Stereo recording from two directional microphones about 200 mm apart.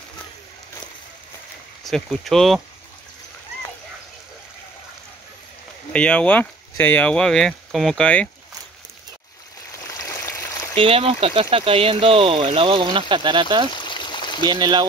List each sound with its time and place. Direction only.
1.9 s speech: centre (ahead or behind)
5.9 s speech: 5° left (ahead or behind)
9.7 s a sound: 15° left (ahead or behind)
10.8 s speech: 30° right (ahead or behind)
13.7 s stream: 20° left (ahead or behind)
14.4 s speech: 20° right (ahead or behind)